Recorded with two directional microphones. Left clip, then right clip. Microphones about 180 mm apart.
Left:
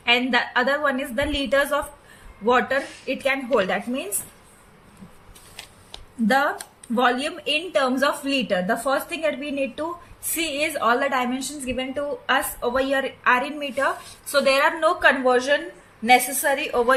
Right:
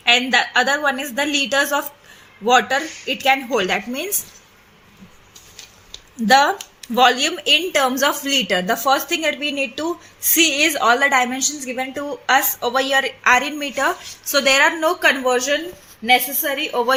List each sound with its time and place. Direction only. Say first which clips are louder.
0.0 s a woman's voice: right 5 dB; 50° right (ahead or behind)
6.2 s a woman's voice: right 7 dB; 50° right (ahead or behind)